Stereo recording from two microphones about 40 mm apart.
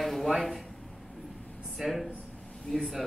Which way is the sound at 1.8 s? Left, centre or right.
Centre.